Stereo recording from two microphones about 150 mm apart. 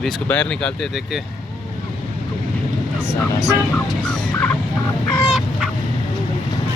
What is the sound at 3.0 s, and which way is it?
Speech, 20° left (ahead or behind).